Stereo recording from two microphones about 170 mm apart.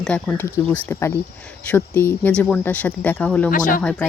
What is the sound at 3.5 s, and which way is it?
Speech, 55° left (ahead or behind).